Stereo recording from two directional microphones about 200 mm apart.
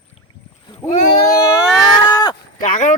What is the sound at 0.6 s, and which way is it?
Rowboat, 35° left (ahead or behind).